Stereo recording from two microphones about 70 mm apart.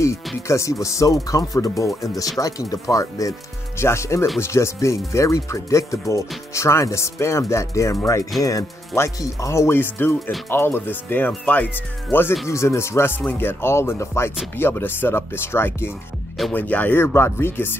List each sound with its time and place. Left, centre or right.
0.5 s speech: left
9.8 s speech: left
12.4 s speech: left
16.5 s speech: left
17.0 s speech: left